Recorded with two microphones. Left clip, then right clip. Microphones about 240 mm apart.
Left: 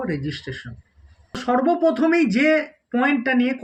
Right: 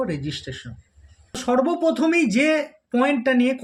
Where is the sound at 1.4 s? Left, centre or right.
Centre.